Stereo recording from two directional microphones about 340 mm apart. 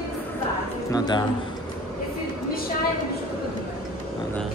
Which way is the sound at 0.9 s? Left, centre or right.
Centre.